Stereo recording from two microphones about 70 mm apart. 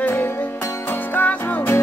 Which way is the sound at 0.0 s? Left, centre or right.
Left.